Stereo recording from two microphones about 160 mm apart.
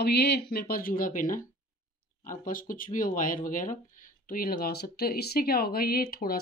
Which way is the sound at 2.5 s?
60° left (ahead or behind).